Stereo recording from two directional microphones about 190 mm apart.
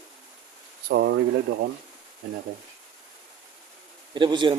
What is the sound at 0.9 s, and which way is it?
Speech, 60° right (ahead or behind).